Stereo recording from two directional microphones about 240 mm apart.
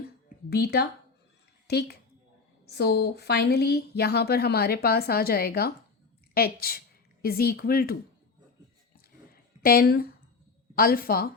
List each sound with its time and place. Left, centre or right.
0.5 s a woman's voice: left
9.3 s a sound: left
10.8 s speech: left